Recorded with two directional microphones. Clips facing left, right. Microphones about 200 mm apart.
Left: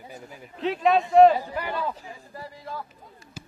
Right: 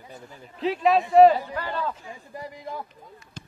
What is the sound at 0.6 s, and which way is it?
Speech, centre (ahead or behind).